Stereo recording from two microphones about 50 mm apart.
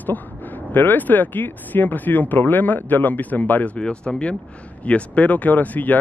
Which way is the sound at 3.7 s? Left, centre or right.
Left.